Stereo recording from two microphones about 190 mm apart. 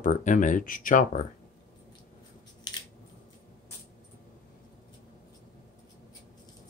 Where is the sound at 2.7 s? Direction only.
20° left (ahead or behind).